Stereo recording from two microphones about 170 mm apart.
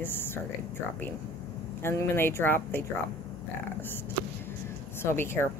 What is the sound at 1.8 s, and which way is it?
A woman's voice, 15° left (ahead or behind).